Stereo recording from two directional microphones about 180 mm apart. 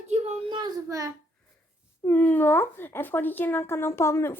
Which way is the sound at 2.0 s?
10° left (ahead or behind).